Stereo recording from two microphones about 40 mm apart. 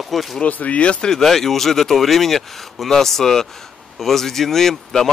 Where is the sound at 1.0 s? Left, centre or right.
Centre.